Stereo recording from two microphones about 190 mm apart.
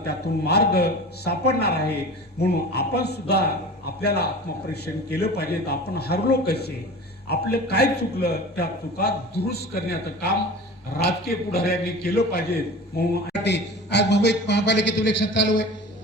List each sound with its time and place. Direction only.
0.0 s a man's voice: 60° left (ahead or behind)